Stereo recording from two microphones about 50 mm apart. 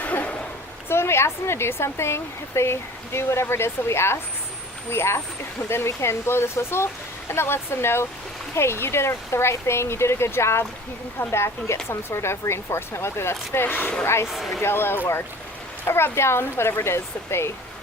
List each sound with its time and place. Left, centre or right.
0.0 s a sound: left
0.9 s speech: left
14.0 s speech: left
14.3 s speech: centre
14.6 s speech: left